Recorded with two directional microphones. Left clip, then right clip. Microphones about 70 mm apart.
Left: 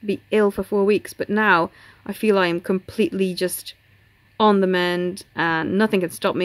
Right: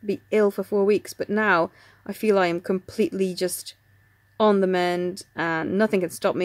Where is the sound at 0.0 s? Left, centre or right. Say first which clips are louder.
Left 2 dB; right.